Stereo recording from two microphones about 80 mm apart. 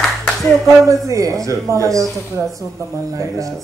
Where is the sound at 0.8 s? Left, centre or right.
Right.